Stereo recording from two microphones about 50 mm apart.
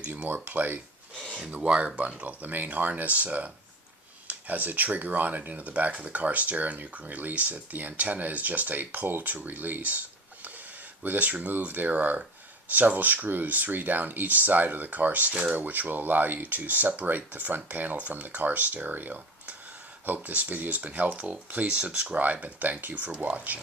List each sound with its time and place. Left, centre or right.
0.3 s speech: right
11.0 s speech: right
15.3 s speech: right
15.5 s speech: right